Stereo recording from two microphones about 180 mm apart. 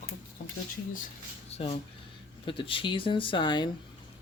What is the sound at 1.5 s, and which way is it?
Speech, 35° left (ahead or behind).